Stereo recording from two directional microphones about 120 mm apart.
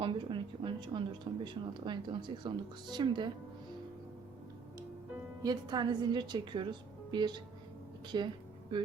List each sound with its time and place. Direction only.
0.0 s a sound: 40° right (ahead or behind)
1.3 s a woman's voice: 45° right (ahead or behind)
5.4 s a woman's voice: 35° right (ahead or behind)